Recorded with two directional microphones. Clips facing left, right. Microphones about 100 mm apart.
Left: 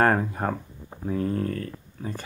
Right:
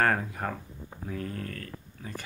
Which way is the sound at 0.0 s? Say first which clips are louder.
Left 5 dB; 35° left (ahead or behind).